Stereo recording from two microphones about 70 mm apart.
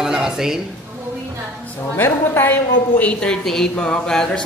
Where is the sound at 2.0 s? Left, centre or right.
Left.